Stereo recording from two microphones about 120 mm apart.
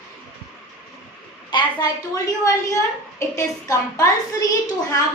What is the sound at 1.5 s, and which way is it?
Speech, 40° left (ahead or behind).